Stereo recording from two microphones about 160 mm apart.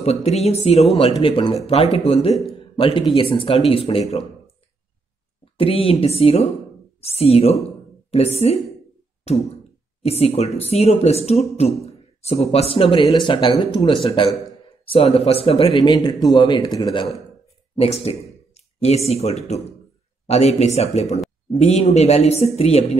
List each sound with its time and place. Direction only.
0.0 s speech: 40° left (ahead or behind)
5.4 s speech: 35° left (ahead or behind)
9.3 s a sound: 40° left (ahead or behind)
10.0 s speech: 40° left (ahead or behind); by 17.0 s 25° left (ahead or behind)
17.7 s speech: 40° left (ahead or behind)
18.5 s a sound: 40° left (ahead or behind)
19.0 s speech: 40° left (ahead or behind)